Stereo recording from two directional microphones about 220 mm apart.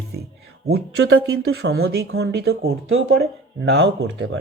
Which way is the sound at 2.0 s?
50° right (ahead or behind).